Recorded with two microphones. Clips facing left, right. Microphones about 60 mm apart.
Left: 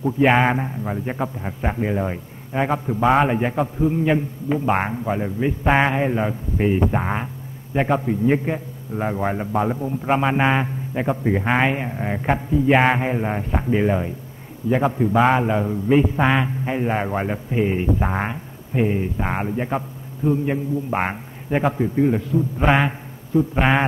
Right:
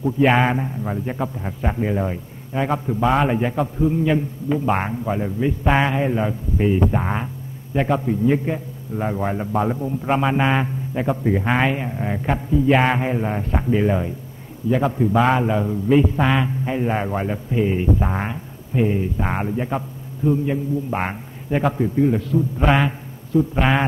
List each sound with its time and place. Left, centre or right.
0.0 s a man's voice: centre
0.5 s a man's voice: left